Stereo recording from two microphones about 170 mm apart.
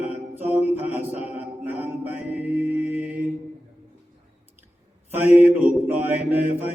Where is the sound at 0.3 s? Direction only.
10° right (ahead or behind).